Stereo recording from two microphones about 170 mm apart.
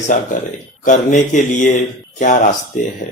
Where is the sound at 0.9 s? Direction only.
45° left (ahead or behind).